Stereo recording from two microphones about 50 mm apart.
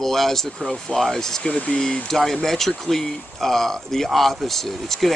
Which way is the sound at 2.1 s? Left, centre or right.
Centre.